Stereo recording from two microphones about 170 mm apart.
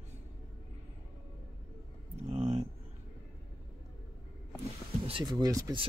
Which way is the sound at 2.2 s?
35° right (ahead or behind).